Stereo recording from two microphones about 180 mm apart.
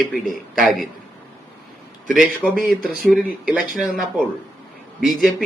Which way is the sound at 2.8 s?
55° left (ahead or behind).